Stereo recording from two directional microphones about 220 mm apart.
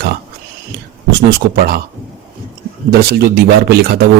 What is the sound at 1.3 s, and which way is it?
Speech, 45° right (ahead or behind).